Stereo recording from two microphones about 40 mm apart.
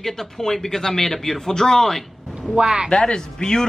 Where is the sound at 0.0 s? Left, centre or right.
Centre.